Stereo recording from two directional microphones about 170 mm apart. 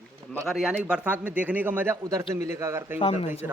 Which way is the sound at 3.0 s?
35° left (ahead or behind).